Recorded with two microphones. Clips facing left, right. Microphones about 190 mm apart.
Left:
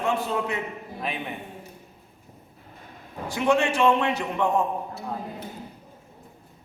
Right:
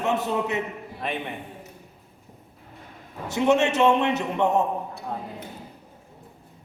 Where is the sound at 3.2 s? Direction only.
20° right (ahead or behind).